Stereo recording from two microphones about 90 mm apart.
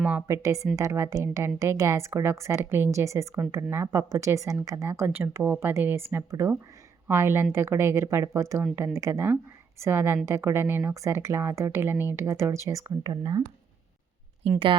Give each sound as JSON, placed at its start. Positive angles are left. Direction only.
{"t": 0.0, "sound": "a woman's voice", "side_deg": -15}
{"t": 0.3, "sound": "a woman's voice", "side_deg": -35}